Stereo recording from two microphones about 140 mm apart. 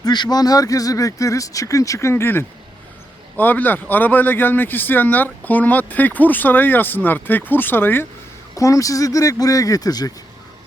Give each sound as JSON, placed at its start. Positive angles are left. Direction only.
{"t": 0.0, "sound": "speech", "side_deg": 30}